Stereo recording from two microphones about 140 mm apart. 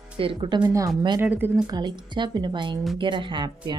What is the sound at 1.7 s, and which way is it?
Speech, 30° right (ahead or behind).